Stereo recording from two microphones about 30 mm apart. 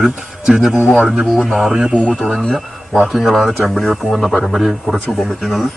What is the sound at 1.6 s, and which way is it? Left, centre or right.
Speech, centre.